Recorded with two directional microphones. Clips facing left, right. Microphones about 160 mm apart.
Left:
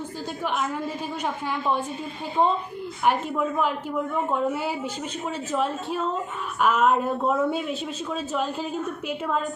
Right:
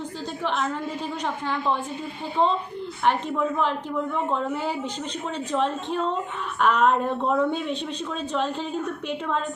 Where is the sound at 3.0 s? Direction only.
5° left (ahead or behind).